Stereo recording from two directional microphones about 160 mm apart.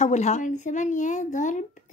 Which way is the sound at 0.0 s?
45° left (ahead or behind).